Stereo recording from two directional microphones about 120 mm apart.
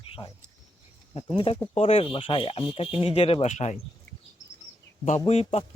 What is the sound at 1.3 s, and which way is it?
Speech, 45° left (ahead or behind).